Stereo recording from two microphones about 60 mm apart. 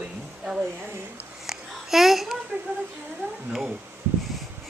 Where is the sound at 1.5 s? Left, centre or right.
Centre.